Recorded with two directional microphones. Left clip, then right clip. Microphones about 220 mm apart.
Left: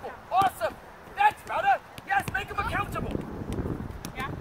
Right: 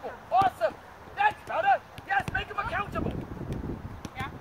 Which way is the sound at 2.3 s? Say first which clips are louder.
Left 1 dB; 30° left (ahead or behind).